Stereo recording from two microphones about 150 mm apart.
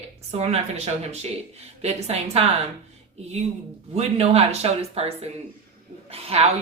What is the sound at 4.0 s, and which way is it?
Speech, 45° right (ahead or behind).